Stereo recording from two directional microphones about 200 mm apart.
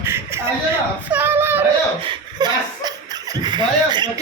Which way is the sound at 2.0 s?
25° right (ahead or behind).